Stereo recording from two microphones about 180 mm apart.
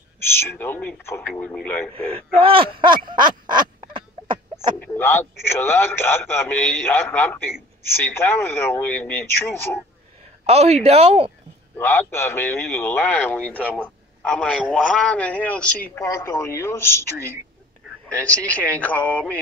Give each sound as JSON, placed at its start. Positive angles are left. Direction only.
{"t": 0.3, "sound": "a man's voice", "side_deg": 10}
{"t": 2.0, "sound": "speech", "side_deg": -30}
{"t": 3.1, "sound": "a sound", "side_deg": -25}
{"t": 4.7, "sound": "a man's voice", "side_deg": 10}
{"t": 10.4, "sound": "speech", "side_deg": -35}
{"t": 11.7, "sound": "a man's voice", "side_deg": 10}
{"t": 18.0, "sound": "a man's voice", "side_deg": 5}